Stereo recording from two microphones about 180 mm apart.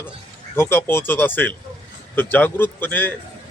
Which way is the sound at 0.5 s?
15° left (ahead or behind).